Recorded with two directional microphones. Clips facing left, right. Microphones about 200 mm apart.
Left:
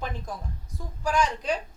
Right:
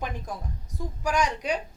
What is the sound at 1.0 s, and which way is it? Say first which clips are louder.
Speech: left 1 dB; 15° right (ahead or behind).